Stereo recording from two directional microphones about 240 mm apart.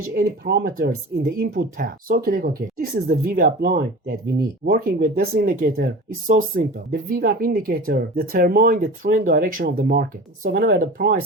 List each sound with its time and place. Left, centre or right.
0.1 s speech: right